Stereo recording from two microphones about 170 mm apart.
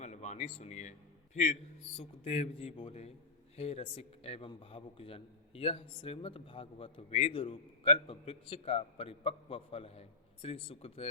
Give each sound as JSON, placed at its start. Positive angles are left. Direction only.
{"t": 0.0, "sound": "a man's voice", "side_deg": 40}